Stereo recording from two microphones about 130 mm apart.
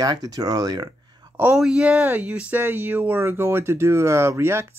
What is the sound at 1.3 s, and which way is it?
Speech, 15° right (ahead or behind).